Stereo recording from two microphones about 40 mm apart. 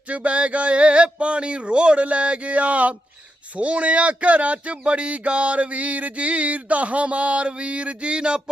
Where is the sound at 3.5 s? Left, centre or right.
Right.